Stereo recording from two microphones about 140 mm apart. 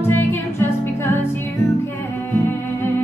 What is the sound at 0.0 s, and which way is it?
Music, 15° left (ahead or behind).